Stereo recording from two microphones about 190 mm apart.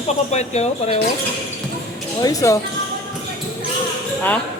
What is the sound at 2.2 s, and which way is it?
Speech, 20° left (ahead or behind).